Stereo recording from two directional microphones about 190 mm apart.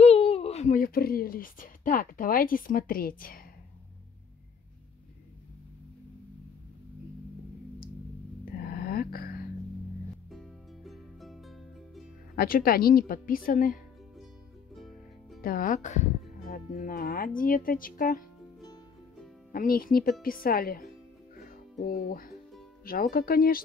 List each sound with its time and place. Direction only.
0.0 s speech: 35° left (ahead or behind); by 3.3 s 50° left (ahead or behind)
8.5 s a sound: 55° left (ahead or behind)
10.3 s music: centre (ahead or behind)
12.4 s speech: 50° left (ahead or behind)
14.8 s music: centre (ahead or behind)
15.4 s speech: 45° left (ahead or behind)
19.5 s speech: 50° left (ahead or behind)
21.4 s music: 50° left (ahead or behind)
22.8 s speech: 50° left (ahead or behind)